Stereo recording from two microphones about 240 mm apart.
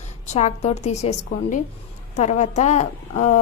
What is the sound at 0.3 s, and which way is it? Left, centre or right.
A woman's voice, left.